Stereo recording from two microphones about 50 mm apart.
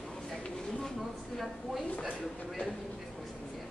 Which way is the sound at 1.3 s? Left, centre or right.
Centre.